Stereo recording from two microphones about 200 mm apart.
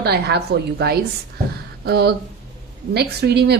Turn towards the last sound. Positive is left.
turn(degrees=-55)  # may be behind; listen again after turning